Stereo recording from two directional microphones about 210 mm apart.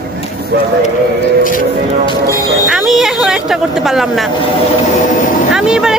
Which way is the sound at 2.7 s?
Centre (ahead or behind).